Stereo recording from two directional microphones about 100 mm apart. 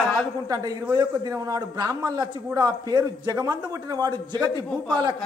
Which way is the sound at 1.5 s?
40° right (ahead or behind).